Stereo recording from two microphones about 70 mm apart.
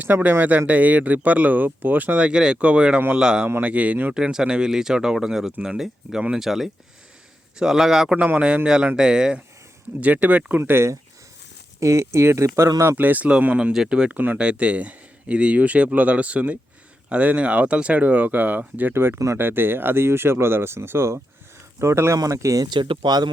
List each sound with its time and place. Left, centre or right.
0.0 s speech: right
4.1 s a man's voice: centre
8.1 s speech: centre
10.6 s speech: right
13.0 s speech: right
18.9 s speech: right
22.6 s speech: right